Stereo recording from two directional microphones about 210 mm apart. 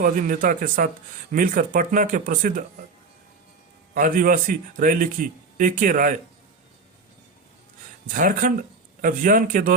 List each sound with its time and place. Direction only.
0.0 s a man's voice: 40° right (ahead or behind)
3.9 s a man's voice: 40° right (ahead or behind)
8.0 s a man's voice: 40° right (ahead or behind)